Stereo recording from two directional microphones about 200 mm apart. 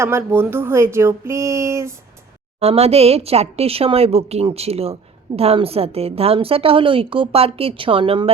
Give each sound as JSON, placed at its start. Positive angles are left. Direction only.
{"t": 0.0, "sound": "speech", "side_deg": -10}
{"t": 2.6, "sound": "a woman's voice", "side_deg": -30}